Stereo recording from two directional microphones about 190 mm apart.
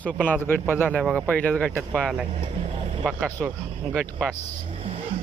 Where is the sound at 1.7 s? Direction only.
10° right (ahead or behind).